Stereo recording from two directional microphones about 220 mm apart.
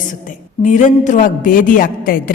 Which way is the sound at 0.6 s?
35° left (ahead or behind).